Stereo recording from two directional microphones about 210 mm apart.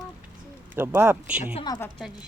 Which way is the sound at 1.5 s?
20° left (ahead or behind).